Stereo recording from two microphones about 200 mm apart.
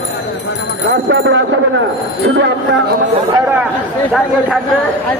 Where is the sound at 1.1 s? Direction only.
60° right (ahead or behind).